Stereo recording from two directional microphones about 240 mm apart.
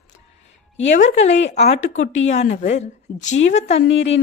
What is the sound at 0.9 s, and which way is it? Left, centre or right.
A woman's voice, left.